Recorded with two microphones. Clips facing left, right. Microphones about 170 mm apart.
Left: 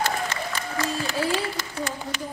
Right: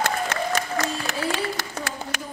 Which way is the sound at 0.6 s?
75° right (ahead or behind).